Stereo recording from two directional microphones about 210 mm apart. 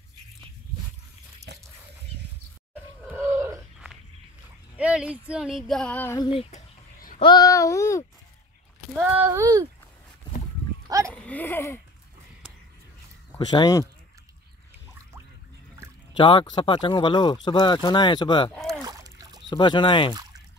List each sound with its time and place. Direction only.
1.5 s a sound: 55° right (ahead or behind)
3.1 s a sound: 10° right (ahead or behind)
5.3 s female singing: centre (ahead or behind); by 6.4 s 20° left (ahead or behind)
6.5 s a sound: 40° left (ahead or behind)
7.2 s speech: 20° left (ahead or behind)
8.9 s speech: 10° right (ahead or behind)
11.1 s speech: 5° left (ahead or behind)
13.5 s speech: 20° left (ahead or behind)
16.1 s speech: 20° left (ahead or behind)
18.5 s rowboat: centre (ahead or behind)
18.8 s splash: 15° right (ahead or behind)
19.5 s speech: 20° left (ahead or behind)